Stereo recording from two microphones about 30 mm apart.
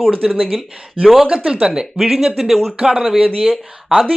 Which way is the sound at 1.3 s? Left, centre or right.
Right.